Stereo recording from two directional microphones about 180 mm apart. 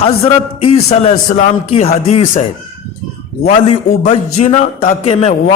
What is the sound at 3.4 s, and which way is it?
A man's voice, 35° left (ahead or behind).